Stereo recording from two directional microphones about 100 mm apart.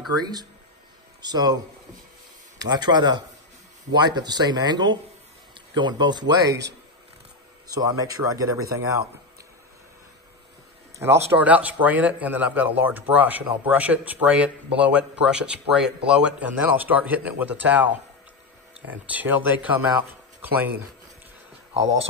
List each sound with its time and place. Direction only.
0.2 s speech: 45° right (ahead or behind)
2.6 s speech: 45° right (ahead or behind)
7.6 s speech: 40° right (ahead or behind)
11.0 s speech: 25° right (ahead or behind)